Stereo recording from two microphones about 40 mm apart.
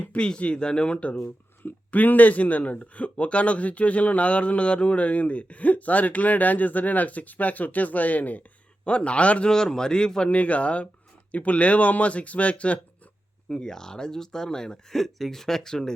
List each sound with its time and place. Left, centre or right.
0.3 s speech: left
1.2 s speech: left
8.8 s speech: left
9.5 s speech: centre
10.2 s speech: left
13.5 s speech: centre